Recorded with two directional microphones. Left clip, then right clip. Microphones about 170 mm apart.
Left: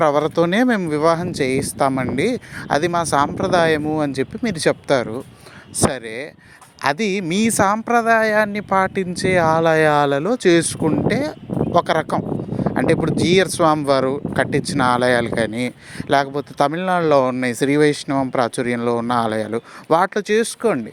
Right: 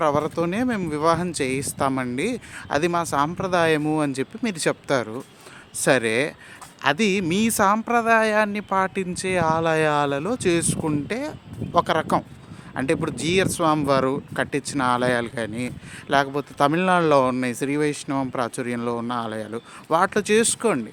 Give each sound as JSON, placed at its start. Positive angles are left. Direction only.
{"t": 0.0, "sound": "speech", "side_deg": 30}
{"t": 0.8, "sound": "speech", "side_deg": 20}
{"t": 19.0, "sound": "speech", "side_deg": 35}